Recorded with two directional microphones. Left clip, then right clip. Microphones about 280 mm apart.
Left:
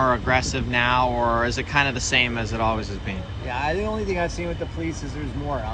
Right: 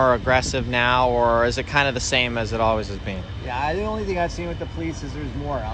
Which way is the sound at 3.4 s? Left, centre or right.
Centre.